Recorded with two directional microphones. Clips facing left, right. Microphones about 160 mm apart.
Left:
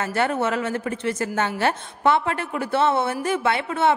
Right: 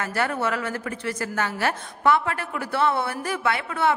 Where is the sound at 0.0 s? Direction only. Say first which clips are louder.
Left 3 dB; 25° left (ahead or behind).